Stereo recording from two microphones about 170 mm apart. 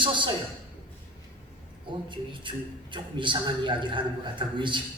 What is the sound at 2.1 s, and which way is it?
A man's voice, 30° right (ahead or behind).